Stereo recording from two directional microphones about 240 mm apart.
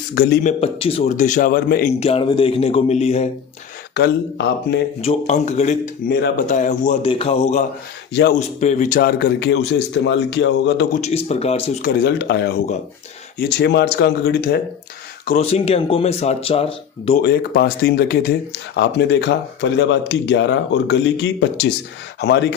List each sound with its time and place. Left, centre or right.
0.1 s a man's voice: left
0.6 s a man's voice: left
3.9 s speech: left
4.9 s a man's voice: left
8.1 s speech: left
8.4 s speech: left
11.0 s a man's voice: left
12.0 s speech: left
15.3 s a man's voice: left
17.2 s speech: left